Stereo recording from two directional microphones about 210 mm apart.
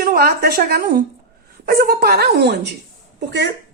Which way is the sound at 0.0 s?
45° right (ahead or behind).